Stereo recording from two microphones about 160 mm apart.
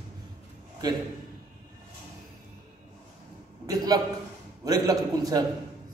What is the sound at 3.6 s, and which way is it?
A man's voice, 25° right (ahead or behind).